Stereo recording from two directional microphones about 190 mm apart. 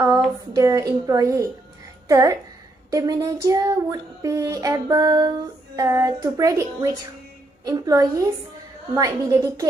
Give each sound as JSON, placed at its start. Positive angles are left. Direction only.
{"t": 0.6, "sound": "child singing", "side_deg": -15}
{"t": 2.0, "sound": "speech", "side_deg": -15}
{"t": 2.9, "sound": "child singing", "side_deg": -20}
{"t": 7.6, "sound": "a woman's voice", "side_deg": -20}